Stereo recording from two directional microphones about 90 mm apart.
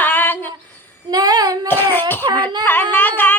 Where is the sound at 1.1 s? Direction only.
45° right (ahead or behind).